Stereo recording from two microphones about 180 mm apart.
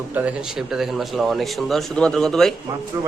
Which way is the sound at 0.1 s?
10° right (ahead or behind).